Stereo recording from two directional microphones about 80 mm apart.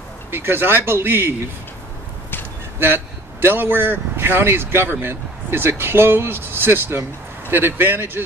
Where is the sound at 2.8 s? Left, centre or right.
Right.